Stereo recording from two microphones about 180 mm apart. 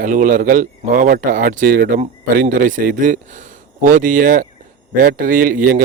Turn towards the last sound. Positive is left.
turn(degrees=-50)  # may be behind; listen again after turning